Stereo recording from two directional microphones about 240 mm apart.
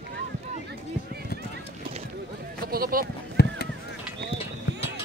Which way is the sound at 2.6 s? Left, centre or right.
Right.